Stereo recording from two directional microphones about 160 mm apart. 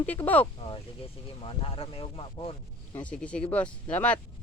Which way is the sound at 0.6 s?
35° left (ahead or behind).